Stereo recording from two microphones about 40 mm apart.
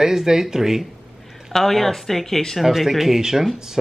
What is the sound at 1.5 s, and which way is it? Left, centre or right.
Speech, centre.